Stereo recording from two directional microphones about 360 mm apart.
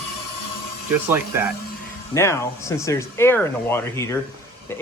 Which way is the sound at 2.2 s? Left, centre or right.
Centre.